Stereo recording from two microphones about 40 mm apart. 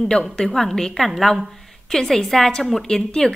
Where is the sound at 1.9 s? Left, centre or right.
Centre.